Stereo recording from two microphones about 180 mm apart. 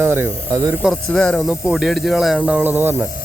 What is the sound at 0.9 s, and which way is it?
Speech, 5° left (ahead or behind).